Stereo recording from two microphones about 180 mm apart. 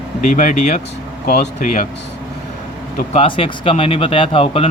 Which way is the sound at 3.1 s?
30° left (ahead or behind).